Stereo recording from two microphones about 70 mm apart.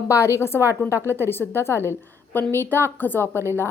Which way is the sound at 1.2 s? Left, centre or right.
Left.